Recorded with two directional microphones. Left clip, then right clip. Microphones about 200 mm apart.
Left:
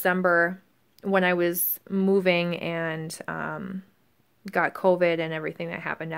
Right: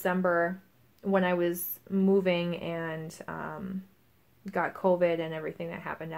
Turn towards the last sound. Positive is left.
turn(degrees=45)  # may be behind; listen again after turning